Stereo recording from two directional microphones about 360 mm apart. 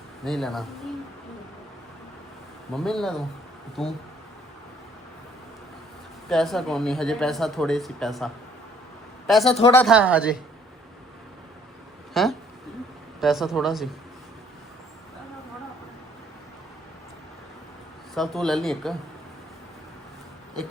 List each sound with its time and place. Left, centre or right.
0.3 s speech: centre
2.7 s speech: centre
6.2 s a man's voice: centre
9.5 s speech: centre
9.7 s speech: centre
12.1 s speech: centre
18.1 s speech: centre